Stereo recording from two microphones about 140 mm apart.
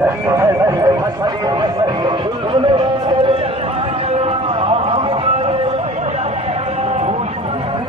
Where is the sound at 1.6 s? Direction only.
35° right (ahead or behind).